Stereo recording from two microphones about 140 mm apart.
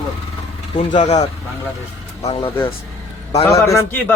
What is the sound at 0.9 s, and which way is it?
Speech, 60° left (ahead or behind).